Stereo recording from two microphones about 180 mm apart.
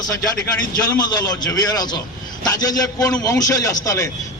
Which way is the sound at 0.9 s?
20° left (ahead or behind).